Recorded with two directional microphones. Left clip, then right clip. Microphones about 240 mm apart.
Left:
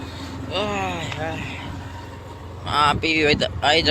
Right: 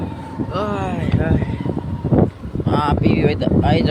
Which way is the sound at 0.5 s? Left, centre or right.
Right.